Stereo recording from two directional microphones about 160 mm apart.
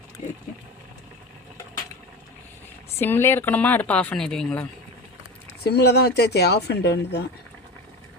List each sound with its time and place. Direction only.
3.0 s speech: 15° left (ahead or behind)
5.6 s speech: 90° left